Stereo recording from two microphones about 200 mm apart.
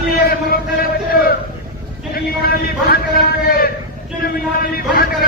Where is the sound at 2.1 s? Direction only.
50° left (ahead or behind).